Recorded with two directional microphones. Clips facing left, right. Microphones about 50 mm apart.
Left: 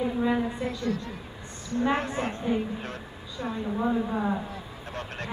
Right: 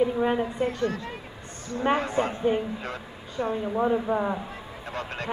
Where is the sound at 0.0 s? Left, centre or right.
Right.